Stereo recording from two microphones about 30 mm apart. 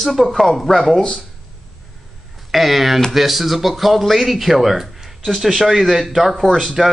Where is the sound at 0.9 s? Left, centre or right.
Left.